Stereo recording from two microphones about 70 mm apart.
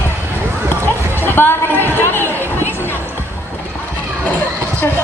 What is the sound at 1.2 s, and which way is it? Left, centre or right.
Chatter, left.